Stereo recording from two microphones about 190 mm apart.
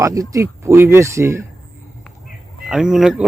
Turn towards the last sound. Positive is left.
turn(degrees=-5)  # may be behind; listen again after turning